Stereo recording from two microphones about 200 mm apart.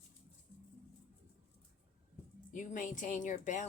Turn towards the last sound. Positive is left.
turn(degrees=35)  # may be behind; listen again after turning